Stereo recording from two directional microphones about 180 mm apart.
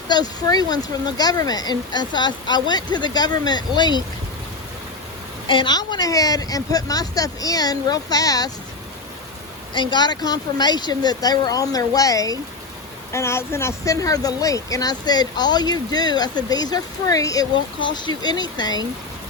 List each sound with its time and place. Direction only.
0.1 s speech: 20° left (ahead or behind)
5.5 s speech: 25° left (ahead or behind)
9.7 s speech: 25° left (ahead or behind)